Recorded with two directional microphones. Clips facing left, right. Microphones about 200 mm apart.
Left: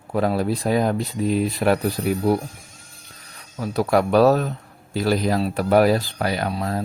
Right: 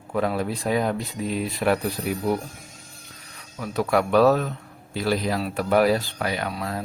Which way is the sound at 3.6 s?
35° left (ahead or behind).